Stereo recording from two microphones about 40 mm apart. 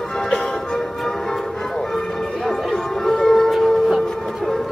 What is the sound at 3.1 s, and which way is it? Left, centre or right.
Music, centre.